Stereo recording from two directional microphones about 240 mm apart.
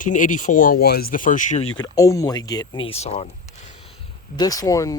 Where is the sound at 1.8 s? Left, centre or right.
Centre.